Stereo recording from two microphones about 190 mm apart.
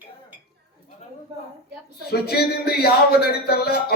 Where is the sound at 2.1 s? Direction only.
55° left (ahead or behind).